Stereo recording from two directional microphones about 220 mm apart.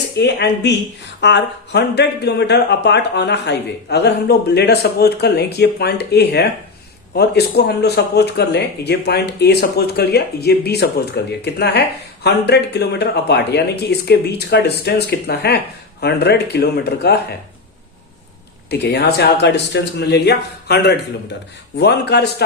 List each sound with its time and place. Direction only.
0.2 s speech: 50° left (ahead or behind)
18.7 s speech: 45° left (ahead or behind)